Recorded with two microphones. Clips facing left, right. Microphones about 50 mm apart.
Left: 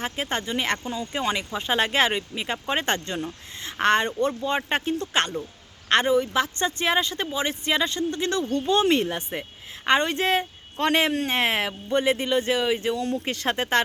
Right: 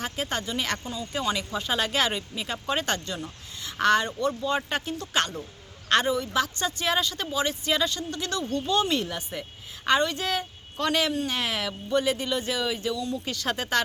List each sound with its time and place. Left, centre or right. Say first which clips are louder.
0.0 s speech: left 2 dB; left
3.0 s a woman's voice: left 4 dB; left